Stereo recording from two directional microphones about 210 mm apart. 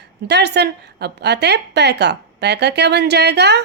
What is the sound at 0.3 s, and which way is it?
A woman's voice, 55° right (ahead or behind).